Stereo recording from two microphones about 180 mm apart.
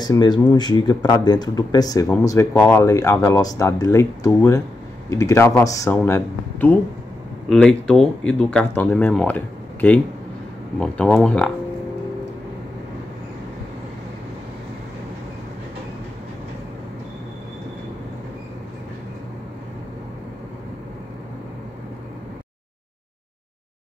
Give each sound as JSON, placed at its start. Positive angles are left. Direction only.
{"t": 0.0, "sound": "speech", "side_deg": 20}